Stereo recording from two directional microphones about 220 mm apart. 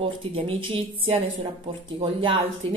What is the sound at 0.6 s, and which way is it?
A woman's voice, 25° right (ahead or behind).